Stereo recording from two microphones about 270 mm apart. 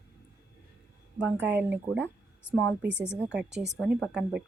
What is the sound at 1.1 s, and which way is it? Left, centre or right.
A woman's voice, centre.